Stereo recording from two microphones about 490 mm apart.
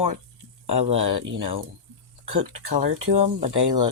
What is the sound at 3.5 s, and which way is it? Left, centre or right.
Speech, right.